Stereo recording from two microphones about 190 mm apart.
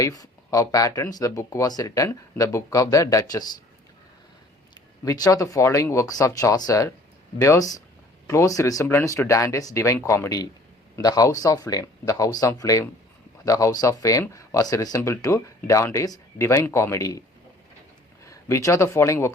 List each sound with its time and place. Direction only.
0.0 s speech: 15° left (ahead or behind)
4.7 s speech: 20° left (ahead or behind)
18.3 s speech: 15° left (ahead or behind)